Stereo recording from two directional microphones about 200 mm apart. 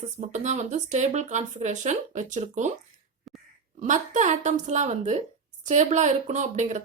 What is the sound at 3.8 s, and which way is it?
Speech, 35° right (ahead or behind).